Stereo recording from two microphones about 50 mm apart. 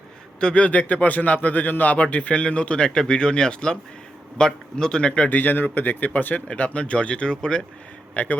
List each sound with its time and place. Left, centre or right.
0.3 s a man's voice: left
5.3 s speech: left
6.5 s a man's voice: left
8.1 s a man's voice: left